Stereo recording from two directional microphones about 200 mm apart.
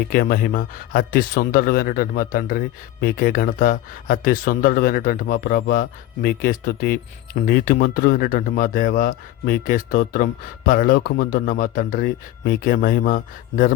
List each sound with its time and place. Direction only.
0.1 s speech: 45° left (ahead or behind)